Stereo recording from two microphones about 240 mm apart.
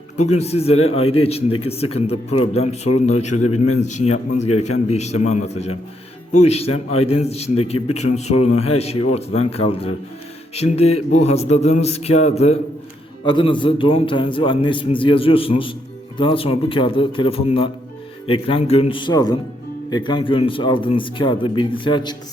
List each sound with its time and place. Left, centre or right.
0.3 s a man's voice: left
3.4 s a man's voice: left
3.8 s a man's voice: left